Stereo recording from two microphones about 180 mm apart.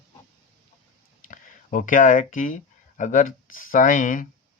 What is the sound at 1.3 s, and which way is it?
Speech, 45° left (ahead or behind).